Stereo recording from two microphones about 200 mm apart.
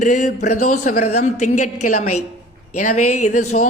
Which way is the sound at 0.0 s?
40° left (ahead or behind).